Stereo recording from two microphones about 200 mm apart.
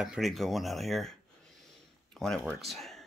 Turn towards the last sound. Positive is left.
turn(degrees=0)  # may be behind; listen again after turning